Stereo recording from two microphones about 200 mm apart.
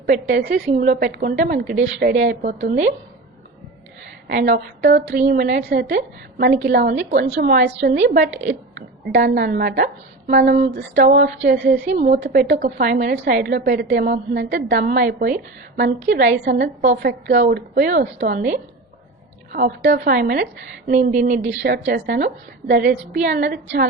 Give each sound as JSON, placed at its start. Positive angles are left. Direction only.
{"t": 0.0, "sound": "a woman's voice", "side_deg": -45}
{"t": 4.3, "sound": "a woman's voice", "side_deg": -45}
{"t": 16.6, "sound": "a woman's voice", "side_deg": -35}
{"t": 17.0, "sound": "a woman's voice", "side_deg": -55}
{"t": 19.5, "sound": "a woman's voice", "side_deg": -45}
{"t": 21.6, "sound": "a woman's voice", "side_deg": -55}